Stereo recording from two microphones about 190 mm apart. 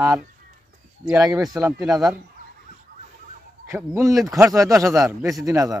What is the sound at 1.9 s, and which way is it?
Speech, centre (ahead or behind).